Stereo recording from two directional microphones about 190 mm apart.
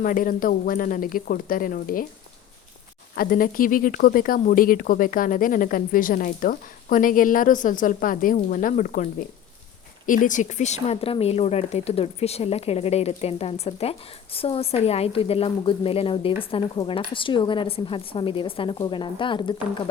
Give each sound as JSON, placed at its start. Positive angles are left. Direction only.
{"t": 0.0, "sound": "speech", "side_deg": 45}
{"t": 3.2, "sound": "speech", "side_deg": 50}
{"t": 10.1, "sound": "a woman's voice", "side_deg": 45}